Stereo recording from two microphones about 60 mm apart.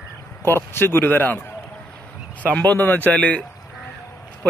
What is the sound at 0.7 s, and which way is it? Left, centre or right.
Speech, left.